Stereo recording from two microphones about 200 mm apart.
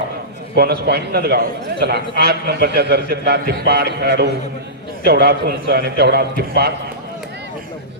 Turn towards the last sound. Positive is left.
turn(degrees=-50)  # may be behind; listen again after turning